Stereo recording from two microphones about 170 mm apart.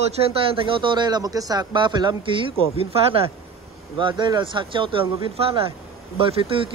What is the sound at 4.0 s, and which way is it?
A man's voice, 30° right (ahead or behind).